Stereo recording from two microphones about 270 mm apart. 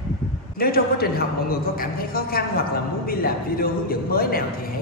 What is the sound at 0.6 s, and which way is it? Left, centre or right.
Speech, left.